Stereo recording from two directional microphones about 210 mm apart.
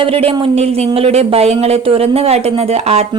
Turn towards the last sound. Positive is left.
turn(degrees=-30)  # may be behind; listen again after turning